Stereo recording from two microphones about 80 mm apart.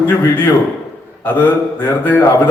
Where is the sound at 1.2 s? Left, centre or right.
Left.